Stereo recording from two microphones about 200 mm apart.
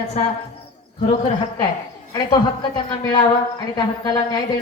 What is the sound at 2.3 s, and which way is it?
Speech, 20° left (ahead or behind).